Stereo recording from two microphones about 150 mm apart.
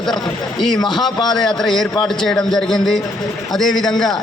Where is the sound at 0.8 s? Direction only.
30° left (ahead or behind).